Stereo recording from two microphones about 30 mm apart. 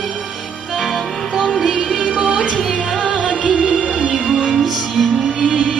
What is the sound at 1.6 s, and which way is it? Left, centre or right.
Music, right.